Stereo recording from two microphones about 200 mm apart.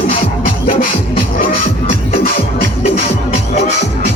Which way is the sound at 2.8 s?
35° left (ahead or behind).